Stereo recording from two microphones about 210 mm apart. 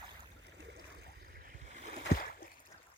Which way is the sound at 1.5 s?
35° right (ahead or behind).